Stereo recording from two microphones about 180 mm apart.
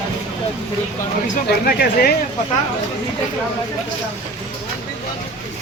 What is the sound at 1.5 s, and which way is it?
Speech, 60° left (ahead or behind).